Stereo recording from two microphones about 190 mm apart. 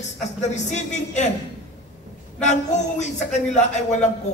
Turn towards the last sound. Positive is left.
turn(degrees=40)  # may be behind; listen again after turning